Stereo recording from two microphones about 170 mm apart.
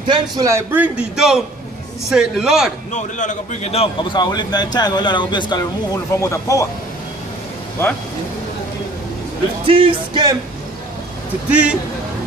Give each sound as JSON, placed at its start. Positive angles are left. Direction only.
{"t": 0.0, "sound": "a man's voice", "side_deg": -25}
{"t": 2.9, "sound": "a man's voice", "side_deg": 45}
{"t": 9.7, "sound": "music", "side_deg": -30}
{"t": 11.4, "sound": "a man's voice", "side_deg": -5}